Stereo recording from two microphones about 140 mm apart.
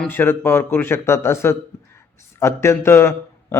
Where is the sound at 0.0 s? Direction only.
15° left (ahead or behind).